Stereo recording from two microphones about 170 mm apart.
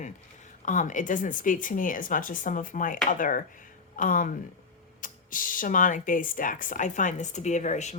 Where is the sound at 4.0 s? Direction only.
50° left (ahead or behind).